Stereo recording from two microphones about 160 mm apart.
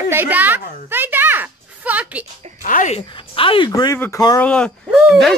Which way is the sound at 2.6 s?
55° left (ahead or behind).